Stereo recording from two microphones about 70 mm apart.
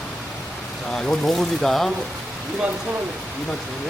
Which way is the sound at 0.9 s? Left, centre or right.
Centre.